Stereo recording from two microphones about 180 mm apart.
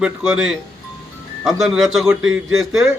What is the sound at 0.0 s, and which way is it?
A man's voice, 5° right (ahead or behind).